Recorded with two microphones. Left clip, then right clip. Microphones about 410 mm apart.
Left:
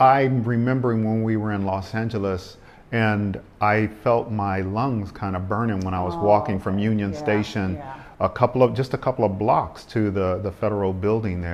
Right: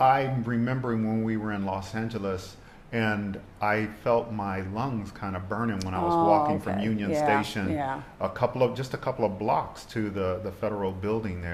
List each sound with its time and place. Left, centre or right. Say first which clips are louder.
0.0 s speech: left 6 dB; left